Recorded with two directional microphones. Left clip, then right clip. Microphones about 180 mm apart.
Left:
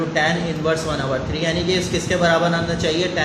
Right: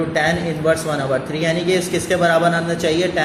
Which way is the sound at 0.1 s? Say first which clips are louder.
Right 1 dB; 40° right (ahead or behind).